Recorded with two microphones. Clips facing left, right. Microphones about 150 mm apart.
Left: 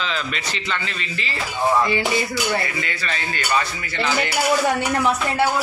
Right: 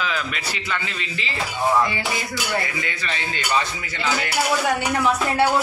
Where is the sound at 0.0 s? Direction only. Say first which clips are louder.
Even; 10° right (ahead or behind).